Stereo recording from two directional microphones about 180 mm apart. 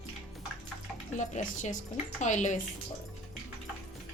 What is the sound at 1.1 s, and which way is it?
A woman's voice, 40° left (ahead or behind).